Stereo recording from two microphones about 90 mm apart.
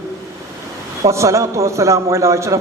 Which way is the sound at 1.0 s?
35° right (ahead or behind).